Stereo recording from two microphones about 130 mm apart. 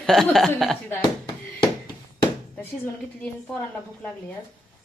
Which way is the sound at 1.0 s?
30° left (ahead or behind).